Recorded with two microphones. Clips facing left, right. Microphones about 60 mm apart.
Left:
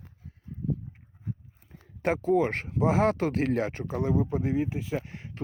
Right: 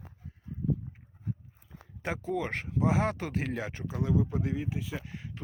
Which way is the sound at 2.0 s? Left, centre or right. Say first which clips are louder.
Left 8 dB; left.